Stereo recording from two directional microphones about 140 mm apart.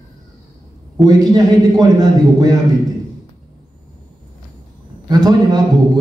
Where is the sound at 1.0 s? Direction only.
30° right (ahead or behind).